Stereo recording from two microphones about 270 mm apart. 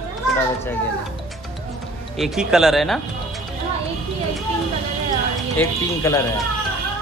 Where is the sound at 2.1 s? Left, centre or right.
Centre.